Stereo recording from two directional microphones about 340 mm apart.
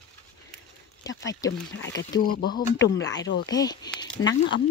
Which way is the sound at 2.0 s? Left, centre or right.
Left.